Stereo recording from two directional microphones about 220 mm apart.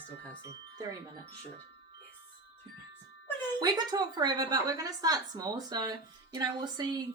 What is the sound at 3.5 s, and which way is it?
A woman's voice, 20° right (ahead or behind).